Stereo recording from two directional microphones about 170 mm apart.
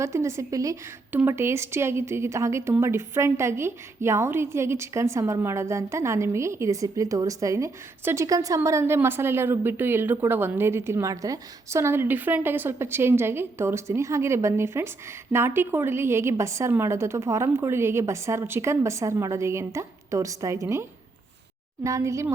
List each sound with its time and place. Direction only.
0.0 s a woman's voice: 15° right (ahead or behind)
21.8 s a woman's voice: 20° right (ahead or behind)